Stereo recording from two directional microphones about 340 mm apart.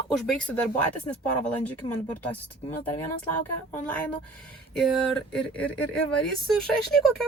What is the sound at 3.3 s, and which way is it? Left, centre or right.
Speech, centre.